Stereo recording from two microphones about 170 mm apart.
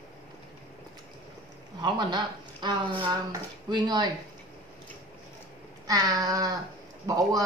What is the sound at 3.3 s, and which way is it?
Speech, 25° right (ahead or behind).